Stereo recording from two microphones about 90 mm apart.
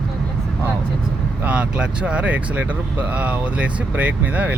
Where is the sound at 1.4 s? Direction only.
15° right (ahead or behind).